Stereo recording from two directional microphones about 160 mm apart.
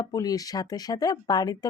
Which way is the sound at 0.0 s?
25° left (ahead or behind).